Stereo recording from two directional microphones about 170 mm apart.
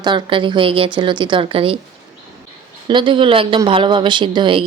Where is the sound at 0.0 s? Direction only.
25° right (ahead or behind).